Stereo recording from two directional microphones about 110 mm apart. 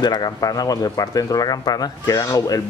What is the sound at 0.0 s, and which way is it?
Speech, 40° left (ahead or behind).